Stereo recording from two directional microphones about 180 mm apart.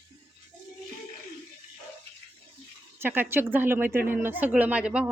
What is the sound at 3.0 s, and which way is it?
Speech, 10° right (ahead or behind).